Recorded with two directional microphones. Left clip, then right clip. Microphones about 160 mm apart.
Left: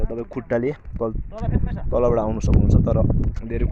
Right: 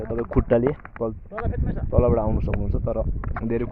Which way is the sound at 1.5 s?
70° right (ahead or behind).